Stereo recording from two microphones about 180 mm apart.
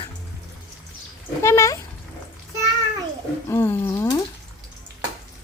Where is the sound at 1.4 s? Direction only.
15° left (ahead or behind).